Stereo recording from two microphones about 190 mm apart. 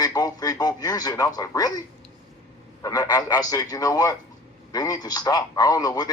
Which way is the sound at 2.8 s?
20° left (ahead or behind).